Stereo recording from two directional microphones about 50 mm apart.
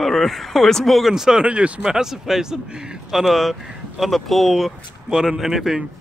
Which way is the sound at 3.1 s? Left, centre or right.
Centre.